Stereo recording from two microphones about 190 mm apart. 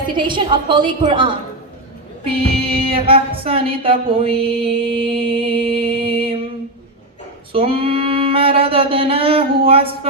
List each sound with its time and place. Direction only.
0.2 s music: 25° right (ahead or behind)
5.8 s mantra: 30° right (ahead or behind)
7.5 s music: 30° right (ahead or behind)